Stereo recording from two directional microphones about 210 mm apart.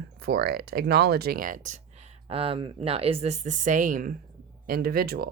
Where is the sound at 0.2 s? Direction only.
50° right (ahead or behind).